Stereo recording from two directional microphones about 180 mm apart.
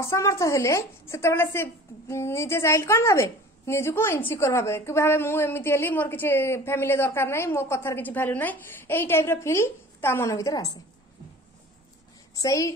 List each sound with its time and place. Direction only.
0.0 s a woman's voice: 15° left (ahead or behind)
12.4 s a woman's voice: 20° left (ahead or behind)